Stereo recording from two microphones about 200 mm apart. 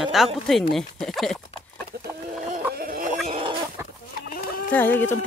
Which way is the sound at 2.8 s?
45° right (ahead or behind).